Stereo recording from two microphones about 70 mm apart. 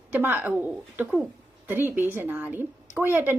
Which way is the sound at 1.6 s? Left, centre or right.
Right.